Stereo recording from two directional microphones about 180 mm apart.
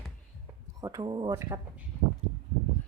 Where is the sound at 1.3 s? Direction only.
15° right (ahead or behind).